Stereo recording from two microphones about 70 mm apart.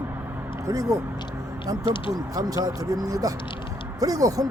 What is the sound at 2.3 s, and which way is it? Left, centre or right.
Speech, right.